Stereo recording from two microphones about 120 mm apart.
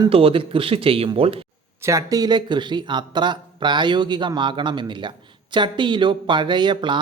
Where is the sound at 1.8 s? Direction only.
25° right (ahead or behind).